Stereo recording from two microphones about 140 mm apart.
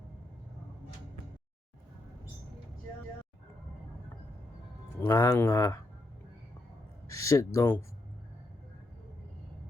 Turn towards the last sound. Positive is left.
turn(degrees=20)  # may be behind; listen again after turning